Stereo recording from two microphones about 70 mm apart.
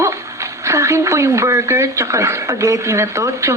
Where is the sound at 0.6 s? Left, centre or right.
Right.